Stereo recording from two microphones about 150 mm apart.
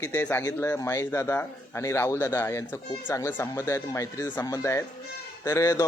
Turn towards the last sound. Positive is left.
turn(degrees=20)  # may be behind; listen again after turning